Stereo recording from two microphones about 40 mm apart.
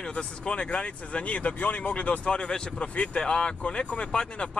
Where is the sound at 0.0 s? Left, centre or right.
Left.